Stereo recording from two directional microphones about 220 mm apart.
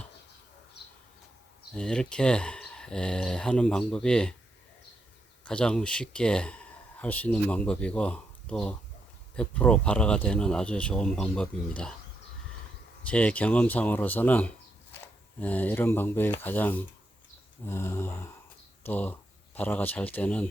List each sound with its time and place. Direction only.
0.8 s a sound: 50° left (ahead or behind)
1.7 s speech: 5° left (ahead or behind)
5.5 s speech: 5° left (ahead or behind)
13.1 s speech: 5° left (ahead or behind)